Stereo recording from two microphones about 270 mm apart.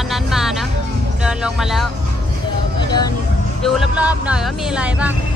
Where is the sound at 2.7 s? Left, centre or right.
Centre.